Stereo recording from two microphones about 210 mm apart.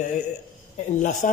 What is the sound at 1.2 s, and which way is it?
Speech, 35° left (ahead or behind).